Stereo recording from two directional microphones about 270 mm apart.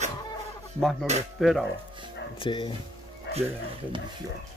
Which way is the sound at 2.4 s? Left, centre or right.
Centre.